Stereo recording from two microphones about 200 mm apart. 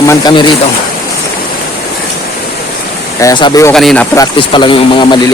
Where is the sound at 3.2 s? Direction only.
20° left (ahead or behind).